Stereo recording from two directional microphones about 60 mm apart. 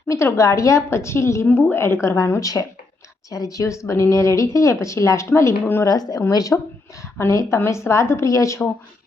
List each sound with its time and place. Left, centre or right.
0.1 s a woman's voice: left
2.4 s speech: left
3.2 s a woman's voice: left
5.8 s speech: left
6.3 s speech: left
7.0 s a woman's voice: left